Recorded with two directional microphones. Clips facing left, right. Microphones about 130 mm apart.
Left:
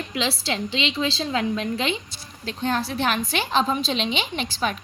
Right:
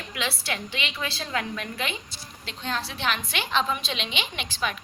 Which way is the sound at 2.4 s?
40° left (ahead or behind).